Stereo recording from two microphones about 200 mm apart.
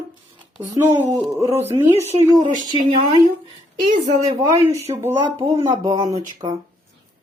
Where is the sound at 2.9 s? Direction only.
25° right (ahead or behind).